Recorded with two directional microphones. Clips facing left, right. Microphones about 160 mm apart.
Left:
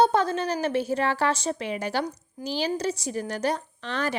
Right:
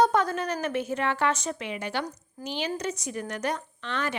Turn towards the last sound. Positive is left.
turn(degrees=35)  # may be behind; listen again after turning